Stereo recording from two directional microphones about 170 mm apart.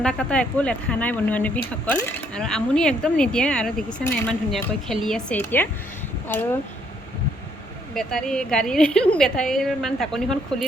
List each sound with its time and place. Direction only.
0.0 s a woman's voice: 5° left (ahead or behind)
7.9 s a woman's voice: 5° left (ahead or behind)